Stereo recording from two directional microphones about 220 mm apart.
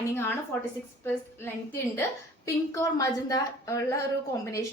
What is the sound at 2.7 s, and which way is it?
A woman's voice, 15° left (ahead or behind).